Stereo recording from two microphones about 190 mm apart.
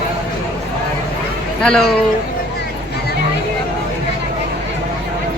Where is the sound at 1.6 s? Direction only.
5° left (ahead or behind).